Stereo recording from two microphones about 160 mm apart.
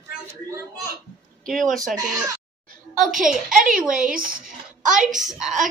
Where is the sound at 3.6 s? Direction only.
60° right (ahead or behind).